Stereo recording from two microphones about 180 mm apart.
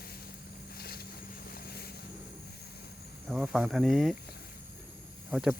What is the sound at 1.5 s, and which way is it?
Vehicle, 60° left (ahead or behind).